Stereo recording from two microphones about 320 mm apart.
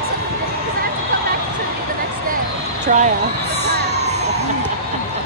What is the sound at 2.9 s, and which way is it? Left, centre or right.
Speech, right.